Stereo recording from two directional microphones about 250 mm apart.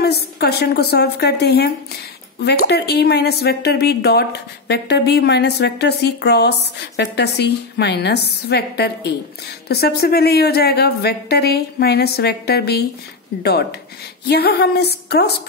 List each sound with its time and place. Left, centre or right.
0.0 s speech: left